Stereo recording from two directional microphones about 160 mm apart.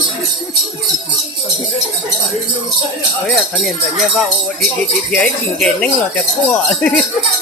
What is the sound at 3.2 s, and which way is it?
Speech, centre (ahead or behind).